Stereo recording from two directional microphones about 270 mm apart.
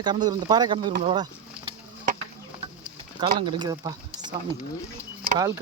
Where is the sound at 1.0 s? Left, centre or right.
Centre.